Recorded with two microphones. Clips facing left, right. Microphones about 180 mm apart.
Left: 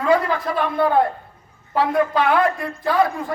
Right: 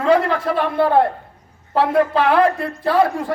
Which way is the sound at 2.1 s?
30° right (ahead or behind).